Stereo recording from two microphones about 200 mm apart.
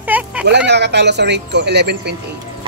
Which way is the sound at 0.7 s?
60° right (ahead or behind).